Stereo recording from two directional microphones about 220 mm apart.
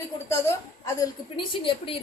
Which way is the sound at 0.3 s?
15° left (ahead or behind).